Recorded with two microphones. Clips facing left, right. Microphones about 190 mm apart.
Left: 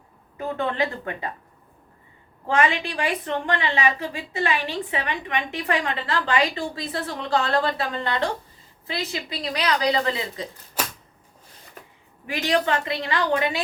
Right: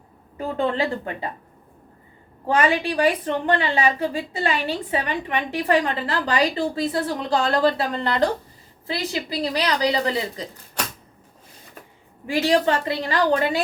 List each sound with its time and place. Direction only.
0.3 s a woman's voice: 30° right (ahead or behind)
2.6 s a woman's voice: 35° right (ahead or behind)
12.3 s a woman's voice: 35° right (ahead or behind)